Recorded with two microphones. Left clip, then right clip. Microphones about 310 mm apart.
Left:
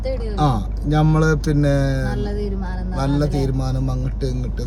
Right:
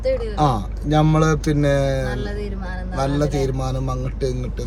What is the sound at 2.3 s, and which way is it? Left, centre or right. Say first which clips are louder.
Music: left 2 dB; centre.